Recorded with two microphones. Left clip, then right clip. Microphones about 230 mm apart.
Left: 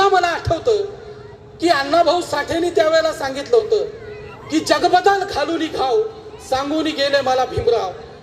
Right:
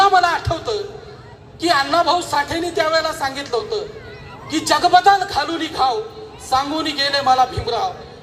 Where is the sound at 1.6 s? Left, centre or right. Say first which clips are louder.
Left 1 dB; centre.